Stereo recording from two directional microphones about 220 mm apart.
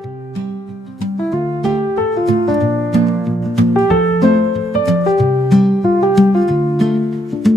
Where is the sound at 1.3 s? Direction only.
Centre (ahead or behind).